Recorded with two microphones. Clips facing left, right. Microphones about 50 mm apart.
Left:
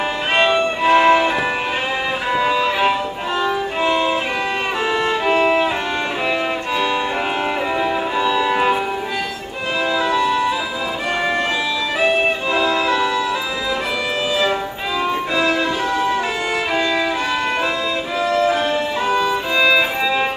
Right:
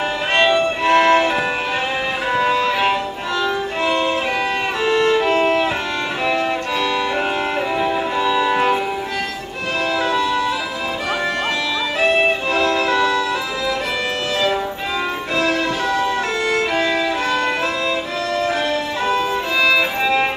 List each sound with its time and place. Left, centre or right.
0.4 s violin: centre
2.4 s violin: centre
3.4 s music: centre
4.8 s violin: centre
7.8 s music: centre
10.2 s music: centre
12.5 s music: centre
15.5 s music: centre
18.3 s violin: centre